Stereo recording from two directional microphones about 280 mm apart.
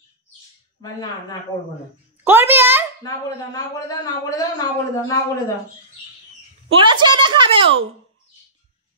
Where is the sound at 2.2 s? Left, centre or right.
Centre.